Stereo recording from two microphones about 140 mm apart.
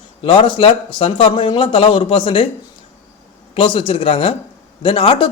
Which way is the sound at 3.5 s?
40° left (ahead or behind).